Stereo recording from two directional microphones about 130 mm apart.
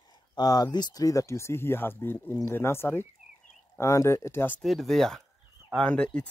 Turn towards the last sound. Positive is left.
turn(degrees=10)  # may be behind; listen again after turning